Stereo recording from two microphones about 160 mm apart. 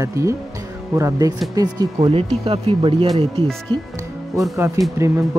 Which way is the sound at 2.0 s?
40° right (ahead or behind).